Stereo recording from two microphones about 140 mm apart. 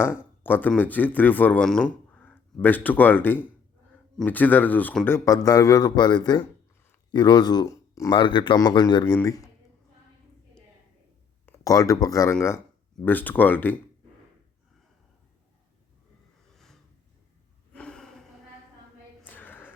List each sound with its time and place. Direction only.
0.0 s speech: 15° left (ahead or behind)
8.1 s speech: 35° left (ahead or behind)
8.5 s a man's voice: 25° left (ahead or behind)
11.6 s speech: 25° left (ahead or behind)
17.7 s gasp: 5° left (ahead or behind)
19.2 s a sound: 15° left (ahead or behind)